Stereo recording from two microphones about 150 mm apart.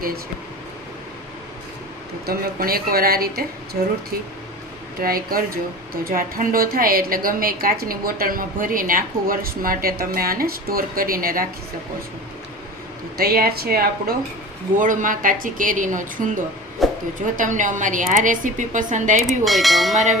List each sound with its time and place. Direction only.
2.2 s a woman's voice: 80° right
4.9 s a woman's voice: 75° right (ahead or behind)
13.1 s speech: 85° right
14.8 s a woman's voice: 60° right (ahead or behind)
16.8 s a sound: centre (ahead or behind)
17.3 s a woman's voice: 60° right (ahead or behind)
19.5 s speech: centre (ahead or behind)